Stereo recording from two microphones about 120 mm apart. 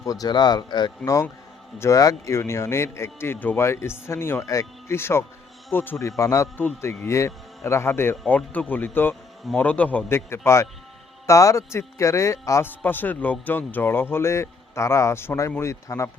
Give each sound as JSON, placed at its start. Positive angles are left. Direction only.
{"t": 0.0, "sound": "speech", "side_deg": 30}